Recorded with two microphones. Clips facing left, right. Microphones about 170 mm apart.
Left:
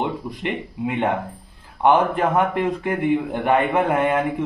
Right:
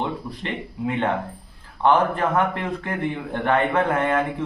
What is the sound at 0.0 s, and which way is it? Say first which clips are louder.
A man's voice: left 3 dB; 15° left (ahead or behind).